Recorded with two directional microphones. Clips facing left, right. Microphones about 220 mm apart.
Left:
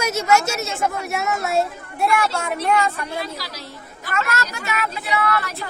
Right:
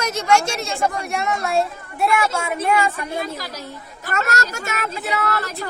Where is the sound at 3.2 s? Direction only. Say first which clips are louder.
Right 2 dB; 50° right (ahead or behind).